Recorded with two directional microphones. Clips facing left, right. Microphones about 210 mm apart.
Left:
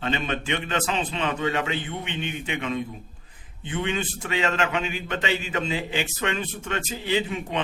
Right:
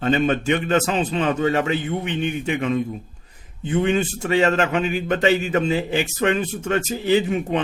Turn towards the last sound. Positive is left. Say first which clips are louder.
# right 7 dB
turn(degrees=-45)  # may be behind; listen again after turning